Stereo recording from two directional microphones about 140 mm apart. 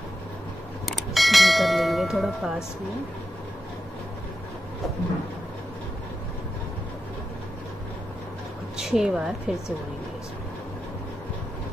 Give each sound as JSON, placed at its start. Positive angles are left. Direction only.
{"t": 0.8, "sound": "bell", "side_deg": 0}
{"t": 8.7, "sound": "a woman's voice", "side_deg": -5}